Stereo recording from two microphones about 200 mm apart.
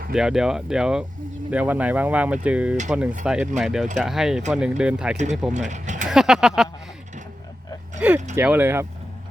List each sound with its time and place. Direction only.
0.1 s speech: 5° right (ahead or behind)
5.5 s mechanisms: 35° right (ahead or behind)
6.1 s speech: centre (ahead or behind)
8.0 s speech: 5° right (ahead or behind)